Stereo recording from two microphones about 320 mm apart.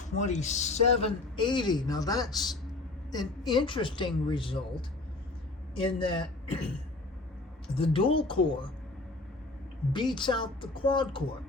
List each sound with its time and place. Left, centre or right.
0.0 s a man's voice: left
7.8 s a man's voice: centre
9.9 s a man's voice: centre